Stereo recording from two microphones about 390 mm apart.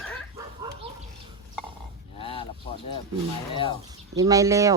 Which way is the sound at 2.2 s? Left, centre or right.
Centre.